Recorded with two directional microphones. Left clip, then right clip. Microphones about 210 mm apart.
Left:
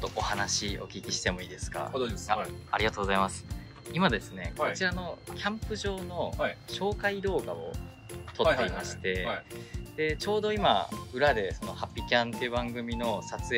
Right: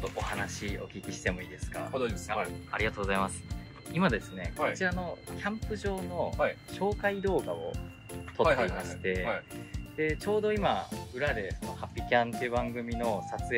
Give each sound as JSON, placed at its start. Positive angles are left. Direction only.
{"t": 0.3, "sound": "speech", "side_deg": 5}
{"t": 11.8, "sound": "speech", "side_deg": 5}